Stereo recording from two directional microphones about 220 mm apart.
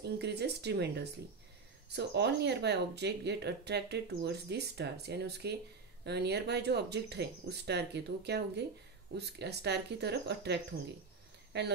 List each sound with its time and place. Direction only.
0.0 s speech: 50° right (ahead or behind)